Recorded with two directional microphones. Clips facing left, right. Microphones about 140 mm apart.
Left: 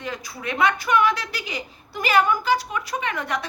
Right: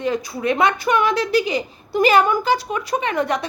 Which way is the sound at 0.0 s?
25° right (ahead or behind).